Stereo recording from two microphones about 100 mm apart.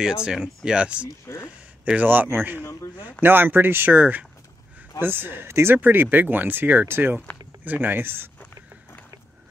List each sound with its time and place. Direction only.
0.0 s speech: 5° right (ahead or behind)
1.2 s a sound: 25° left (ahead or behind)
1.9 s speech: 15° right (ahead or behind)
2.6 s a man's voice: 30° left (ahead or behind)
3.2 s speech: 20° right (ahead or behind)